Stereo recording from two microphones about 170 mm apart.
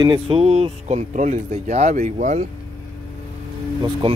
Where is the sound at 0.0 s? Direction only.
30° right (ahead or behind); by 2.4 s 45° right (ahead or behind).